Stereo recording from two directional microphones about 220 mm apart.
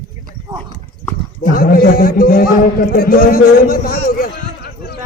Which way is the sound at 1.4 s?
40° left (ahead or behind).